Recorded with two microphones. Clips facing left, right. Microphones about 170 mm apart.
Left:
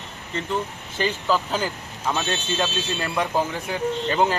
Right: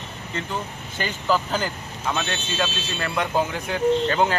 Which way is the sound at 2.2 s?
20° left (ahead or behind).